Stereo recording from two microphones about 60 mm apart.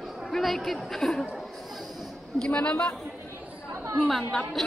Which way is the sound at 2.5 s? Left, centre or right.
Centre.